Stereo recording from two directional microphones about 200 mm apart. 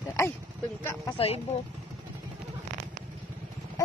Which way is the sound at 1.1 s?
30° left (ahead or behind).